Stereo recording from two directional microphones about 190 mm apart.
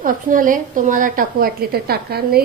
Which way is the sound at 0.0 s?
45° right (ahead or behind).